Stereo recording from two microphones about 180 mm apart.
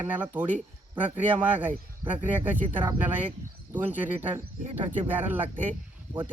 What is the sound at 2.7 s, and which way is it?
Speech, 10° right (ahead or behind).